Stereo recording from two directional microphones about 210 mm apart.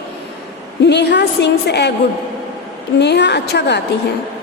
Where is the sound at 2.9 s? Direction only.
55° left (ahead or behind).